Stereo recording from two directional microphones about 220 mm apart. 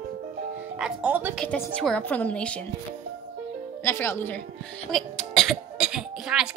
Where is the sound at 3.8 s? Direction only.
10° left (ahead or behind).